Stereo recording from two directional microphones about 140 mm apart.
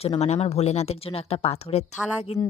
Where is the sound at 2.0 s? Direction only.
10° right (ahead or behind).